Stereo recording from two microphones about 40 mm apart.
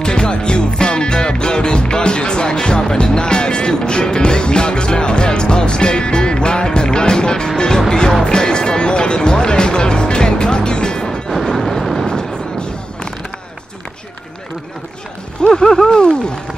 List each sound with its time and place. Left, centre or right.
0.0 s music: centre
11.4 s a sound: centre
12.1 s artillery fire: centre
15.4 s speech: centre